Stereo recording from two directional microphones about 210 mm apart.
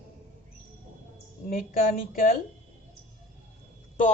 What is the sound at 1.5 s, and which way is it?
Speech, 45° left (ahead or behind).